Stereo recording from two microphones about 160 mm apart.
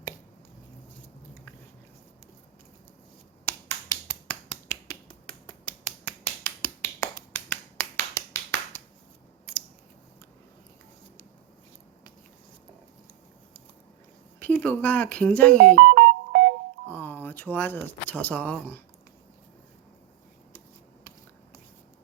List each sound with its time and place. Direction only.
3.4 s finger snapping: 15° left (ahead or behind)
5.8 s finger snapping: 15° left (ahead or behind)
14.3 s speech: 10° left (ahead or behind)
15.7 s music: 90° right
16.8 s speech: 10° left (ahead or behind)